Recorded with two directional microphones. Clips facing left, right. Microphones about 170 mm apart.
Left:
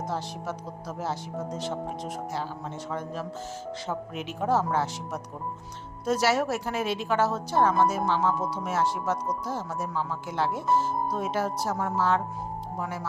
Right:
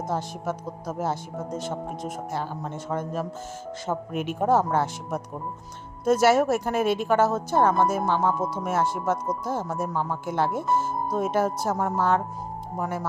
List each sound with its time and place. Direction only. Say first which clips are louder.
0.1 s speech: right 4 dB; 50° right (ahead or behind)